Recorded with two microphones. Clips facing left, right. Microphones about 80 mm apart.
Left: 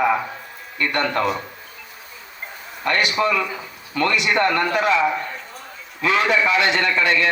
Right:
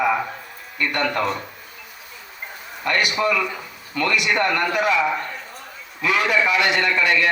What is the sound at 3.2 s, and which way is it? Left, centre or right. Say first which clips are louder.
Speech: left 1 dB; left.